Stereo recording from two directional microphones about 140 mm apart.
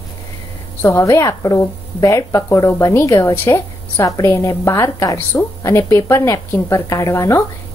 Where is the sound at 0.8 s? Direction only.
20° left (ahead or behind).